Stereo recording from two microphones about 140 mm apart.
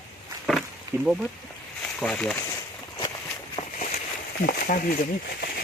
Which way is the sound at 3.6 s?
50° left (ahead or behind).